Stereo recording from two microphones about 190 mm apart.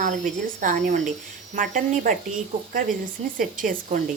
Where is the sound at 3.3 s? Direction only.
45° right (ahead or behind).